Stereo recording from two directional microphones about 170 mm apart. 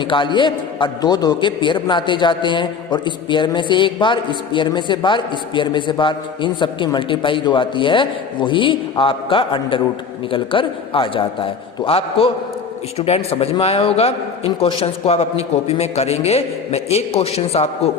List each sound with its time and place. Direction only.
0.0 s a man's voice: 30° left (ahead or behind)